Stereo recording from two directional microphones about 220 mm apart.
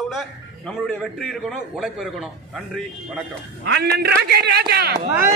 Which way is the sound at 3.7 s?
50° right (ahead or behind).